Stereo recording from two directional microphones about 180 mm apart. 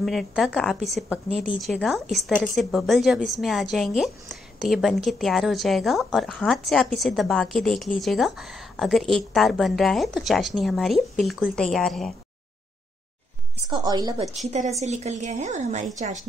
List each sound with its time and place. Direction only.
0.0 s a woman's voice: centre (ahead or behind)
13.7 s a woman's voice: 20° right (ahead or behind)
14.8 s speech: 40° right (ahead or behind)